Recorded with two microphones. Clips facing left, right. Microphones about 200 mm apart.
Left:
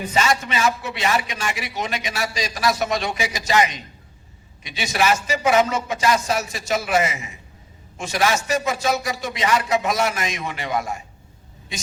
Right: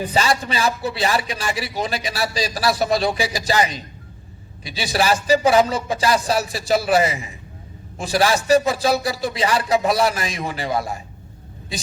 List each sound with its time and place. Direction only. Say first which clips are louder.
0.0 s a man's voice: right 1 dB; 35° right (ahead or behind)